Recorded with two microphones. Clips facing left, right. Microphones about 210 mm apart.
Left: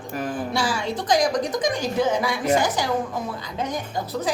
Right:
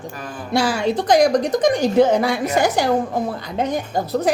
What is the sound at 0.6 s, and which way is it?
A woman's voice, 65° right (ahead or behind).